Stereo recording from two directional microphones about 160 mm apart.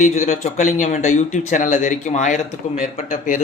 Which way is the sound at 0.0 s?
50° left (ahead or behind).